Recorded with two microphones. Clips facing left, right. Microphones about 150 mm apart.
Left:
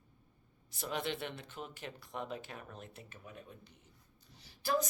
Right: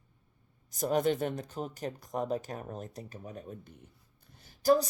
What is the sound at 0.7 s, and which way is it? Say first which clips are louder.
Speech: right 10 dB; 45° right (ahead or behind).